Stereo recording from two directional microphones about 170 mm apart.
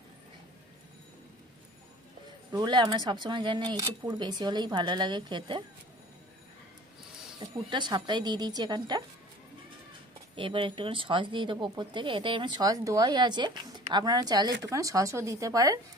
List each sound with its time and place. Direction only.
2.5 s speech: 25° right (ahead or behind)
7.3 s speech: 25° right (ahead or behind)
10.3 s speech: 30° right (ahead or behind)